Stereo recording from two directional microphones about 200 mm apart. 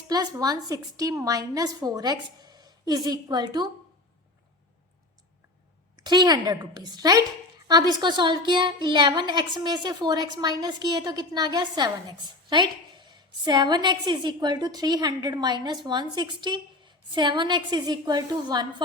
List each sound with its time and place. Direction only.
0.1 s a woman's voice: 20° right (ahead or behind)
6.0 s a woman's voice: 20° right (ahead or behind)